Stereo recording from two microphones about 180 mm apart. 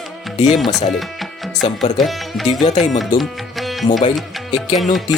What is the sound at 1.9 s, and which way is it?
Speech, centre (ahead or behind).